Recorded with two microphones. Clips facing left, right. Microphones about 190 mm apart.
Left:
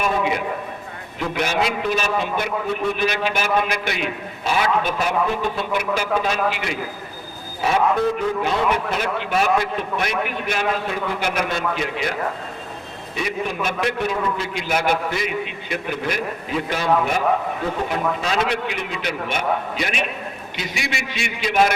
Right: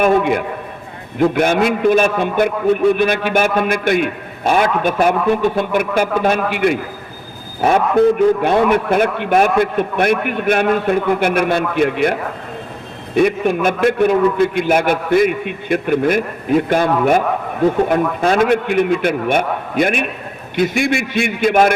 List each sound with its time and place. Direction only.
0.0 s a man's voice: 55° right (ahead or behind)
13.1 s a man's voice: 55° right (ahead or behind)